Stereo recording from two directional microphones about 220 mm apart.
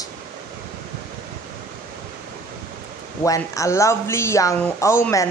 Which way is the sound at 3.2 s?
15° left (ahead or behind).